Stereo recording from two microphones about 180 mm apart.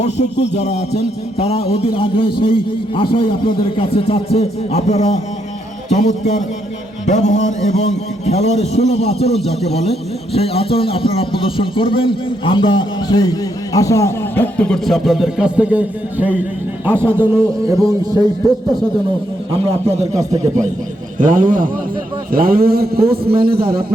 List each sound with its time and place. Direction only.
0.0 s a man's voice: 40° left (ahead or behind); by 18.3 s 20° right (ahead or behind)
19.5 s a man's voice: 35° right (ahead or behind); by 23.8 s 55° right (ahead or behind)